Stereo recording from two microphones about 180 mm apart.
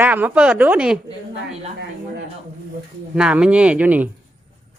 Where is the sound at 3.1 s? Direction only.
5° right (ahead or behind).